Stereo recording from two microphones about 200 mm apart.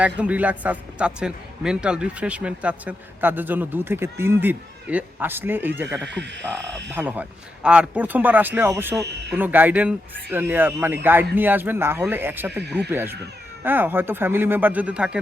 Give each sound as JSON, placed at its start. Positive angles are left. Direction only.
{"t": 0.2, "sound": "a man's voice", "side_deg": -5}
{"t": 6.0, "sound": "speech", "side_deg": -60}
{"t": 6.9, "sound": "a man's voice", "side_deg": -10}